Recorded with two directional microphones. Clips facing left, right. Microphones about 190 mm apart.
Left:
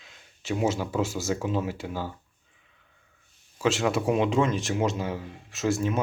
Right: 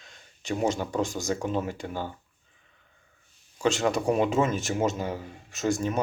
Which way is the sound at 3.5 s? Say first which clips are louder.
Even; centre (ahead or behind).